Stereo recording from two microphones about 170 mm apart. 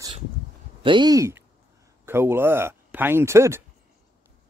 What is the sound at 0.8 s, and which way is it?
Speech, 30° right (ahead or behind).